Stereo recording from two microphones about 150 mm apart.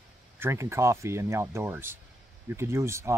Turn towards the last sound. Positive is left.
turn(degrees=-20)  # may be behind; listen again after turning